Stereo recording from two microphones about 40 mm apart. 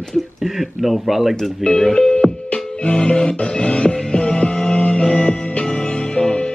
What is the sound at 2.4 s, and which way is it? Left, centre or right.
Music, left.